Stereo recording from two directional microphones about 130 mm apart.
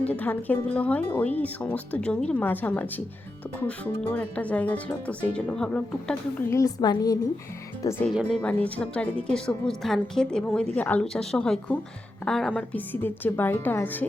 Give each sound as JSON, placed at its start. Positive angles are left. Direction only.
{"t": 0.0, "sound": "speech", "side_deg": 10}
{"t": 6.5, "sound": "a woman's voice", "side_deg": 25}
{"t": 7.8, "sound": "a woman's voice", "side_deg": 20}